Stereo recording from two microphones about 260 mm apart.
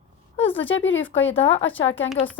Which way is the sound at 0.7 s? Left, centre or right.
Left.